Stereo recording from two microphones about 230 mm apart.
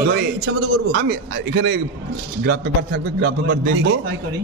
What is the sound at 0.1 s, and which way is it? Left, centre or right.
Speech, right.